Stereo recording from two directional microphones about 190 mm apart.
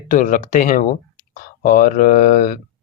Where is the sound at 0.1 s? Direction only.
40° left (ahead or behind).